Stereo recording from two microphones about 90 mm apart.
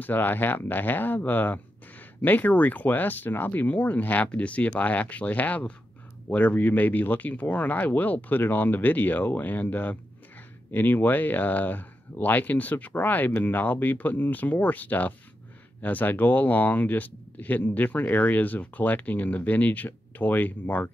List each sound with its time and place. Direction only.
0.0 s speech: 20° left (ahead or behind)